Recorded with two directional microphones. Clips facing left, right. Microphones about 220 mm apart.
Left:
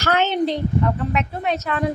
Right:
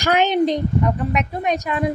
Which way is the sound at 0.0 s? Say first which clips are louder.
Right 3 dB; 15° right (ahead or behind).